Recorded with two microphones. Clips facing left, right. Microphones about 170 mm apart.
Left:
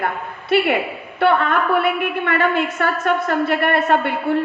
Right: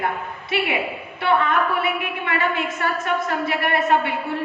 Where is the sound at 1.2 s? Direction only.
55° left (ahead or behind).